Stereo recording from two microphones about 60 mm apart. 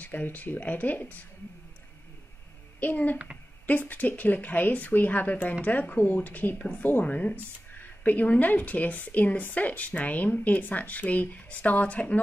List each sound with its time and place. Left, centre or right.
0.0 s a woman's voice: left
2.8 s a woman's voice: left